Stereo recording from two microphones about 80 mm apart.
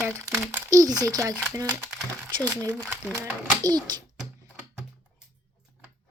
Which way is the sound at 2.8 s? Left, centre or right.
Centre.